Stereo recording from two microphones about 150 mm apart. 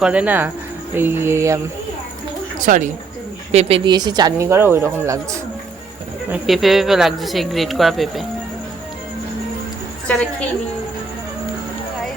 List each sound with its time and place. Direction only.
0.0 s music: 10° right (ahead or behind)
2.6 s speech: 60° right (ahead or behind)
3.5 s speech: 45° right (ahead or behind); by 5.2 s 20° right (ahead or behind)
6.3 s speech: centre (ahead or behind)